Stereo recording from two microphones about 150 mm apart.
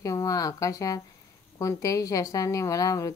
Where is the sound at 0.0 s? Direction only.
20° left (ahead or behind).